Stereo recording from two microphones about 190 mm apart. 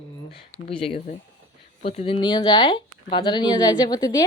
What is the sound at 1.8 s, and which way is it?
Speech, 30° left (ahead or behind).